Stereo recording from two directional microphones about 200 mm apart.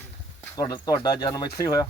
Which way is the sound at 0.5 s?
20° left (ahead or behind).